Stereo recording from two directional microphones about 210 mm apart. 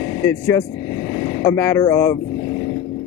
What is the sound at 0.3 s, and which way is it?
Speech, 15° left (ahead or behind).